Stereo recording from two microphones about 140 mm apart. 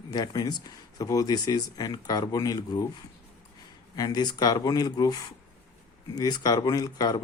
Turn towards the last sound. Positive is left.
turn(degrees=25)  # may be behind; listen again after turning